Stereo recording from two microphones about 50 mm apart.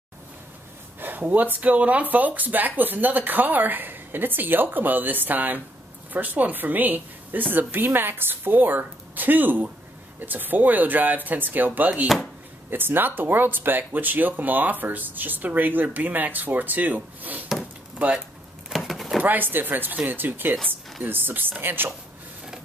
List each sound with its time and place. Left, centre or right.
1.0 s speech: right
17.9 s speech: right
18.9 s a sound: centre
19.2 s speech: right